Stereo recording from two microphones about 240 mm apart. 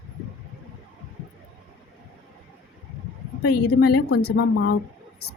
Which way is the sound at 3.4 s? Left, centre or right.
Left.